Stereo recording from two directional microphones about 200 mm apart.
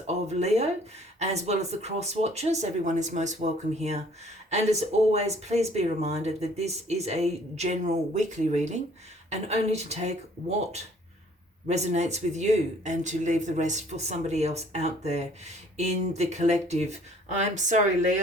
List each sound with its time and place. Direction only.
0.1 s speech: 30° right (ahead or behind)
11.7 s speech: 35° right (ahead or behind)